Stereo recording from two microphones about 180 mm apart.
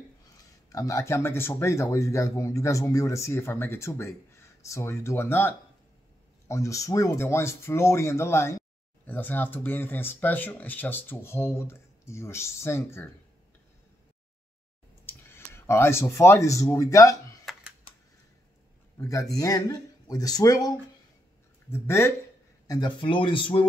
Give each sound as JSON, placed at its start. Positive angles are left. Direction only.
{"t": 0.7, "sound": "speech", "side_deg": 20}
{"t": 15.0, "sound": "speech", "side_deg": 15}
{"t": 17.5, "sound": "typing", "side_deg": 0}
{"t": 18.9, "sound": "speech", "side_deg": 20}